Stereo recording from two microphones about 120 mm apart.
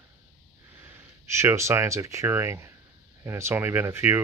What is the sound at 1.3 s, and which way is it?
Speech, 20° right (ahead or behind).